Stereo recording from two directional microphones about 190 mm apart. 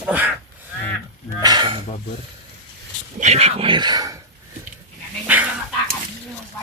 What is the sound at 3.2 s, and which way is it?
Speech, 35° right (ahead or behind).